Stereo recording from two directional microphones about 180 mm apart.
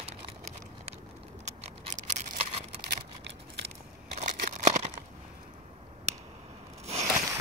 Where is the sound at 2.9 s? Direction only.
65° right (ahead or behind).